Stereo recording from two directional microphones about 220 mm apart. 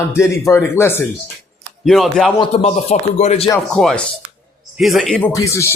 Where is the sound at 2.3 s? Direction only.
30° left (ahead or behind).